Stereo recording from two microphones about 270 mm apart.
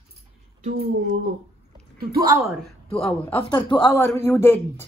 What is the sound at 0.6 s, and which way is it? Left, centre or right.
Speech, right.